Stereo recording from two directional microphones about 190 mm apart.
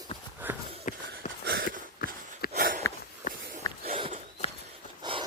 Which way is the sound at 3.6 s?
20° left (ahead or behind).